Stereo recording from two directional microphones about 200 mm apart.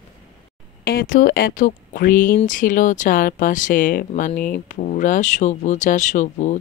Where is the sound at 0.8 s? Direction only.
45° left (ahead or behind).